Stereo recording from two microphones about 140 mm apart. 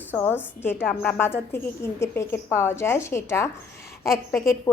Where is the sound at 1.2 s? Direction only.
15° left (ahead or behind).